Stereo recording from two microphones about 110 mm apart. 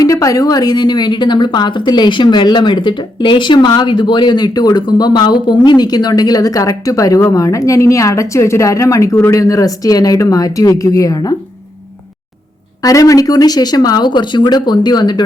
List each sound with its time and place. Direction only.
0.0 s a woman's voice: 30° left (ahead or behind)
12.8 s a woman's voice: 30° left (ahead or behind)